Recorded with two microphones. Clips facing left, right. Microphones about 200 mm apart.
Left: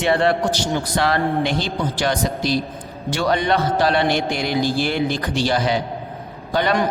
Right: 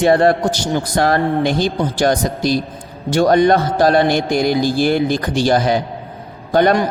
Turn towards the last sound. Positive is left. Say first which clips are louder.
# right 6 dB
turn(degrees=-45)  # may be behind; listen again after turning